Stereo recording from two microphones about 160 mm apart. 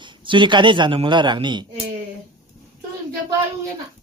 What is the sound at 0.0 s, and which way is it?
Speech, 30° right (ahead or behind).